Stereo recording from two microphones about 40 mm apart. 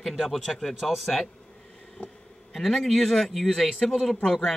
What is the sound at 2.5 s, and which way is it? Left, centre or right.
Speech, centre.